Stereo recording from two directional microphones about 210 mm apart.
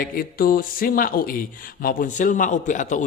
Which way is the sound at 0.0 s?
45° left (ahead or behind).